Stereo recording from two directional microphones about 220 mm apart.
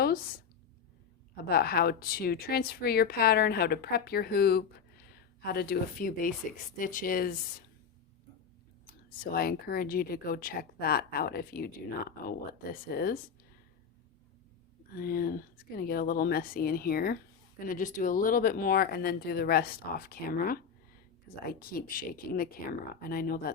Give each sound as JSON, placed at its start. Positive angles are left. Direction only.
{"t": 1.5, "sound": "speech", "side_deg": 45}
{"t": 9.0, "sound": "speech", "side_deg": 45}
{"t": 12.9, "sound": "speech", "side_deg": 45}
{"t": 14.9, "sound": "speech", "side_deg": 40}